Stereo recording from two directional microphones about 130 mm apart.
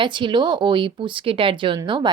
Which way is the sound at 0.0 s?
40° right (ahead or behind).